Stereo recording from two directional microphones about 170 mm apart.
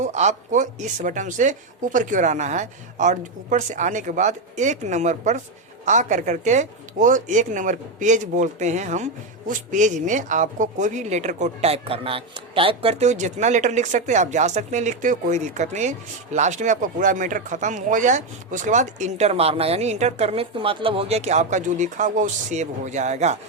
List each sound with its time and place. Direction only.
0.0 s a woman's voice: 45° right (ahead or behind)